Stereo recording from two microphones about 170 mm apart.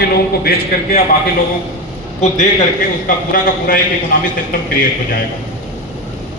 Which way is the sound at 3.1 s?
55° left (ahead or behind).